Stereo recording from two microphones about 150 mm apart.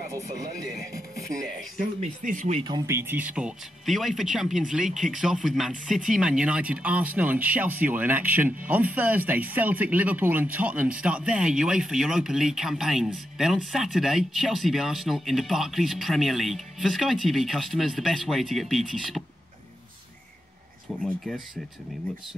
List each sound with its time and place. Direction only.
1.3 s speech: 5° left (ahead or behind)
1.8 s speech: 55° right (ahead or behind)
2.9 s speech: 15° right (ahead or behind)